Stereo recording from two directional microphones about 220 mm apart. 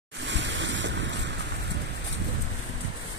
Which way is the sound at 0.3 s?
55° right (ahead or behind).